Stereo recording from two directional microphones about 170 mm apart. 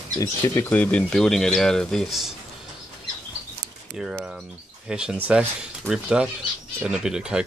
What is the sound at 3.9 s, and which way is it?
Speech, 5° right (ahead or behind).